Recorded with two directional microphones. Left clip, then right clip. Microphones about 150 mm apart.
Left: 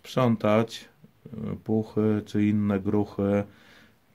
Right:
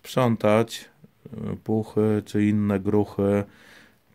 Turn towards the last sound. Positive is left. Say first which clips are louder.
# right 1 dB
turn(degrees=-50)  # may be behind; listen again after turning